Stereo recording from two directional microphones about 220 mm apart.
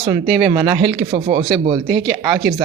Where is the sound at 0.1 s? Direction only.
20° right (ahead or behind).